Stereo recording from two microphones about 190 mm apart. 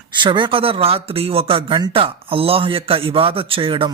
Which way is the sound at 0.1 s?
25° right (ahead or behind).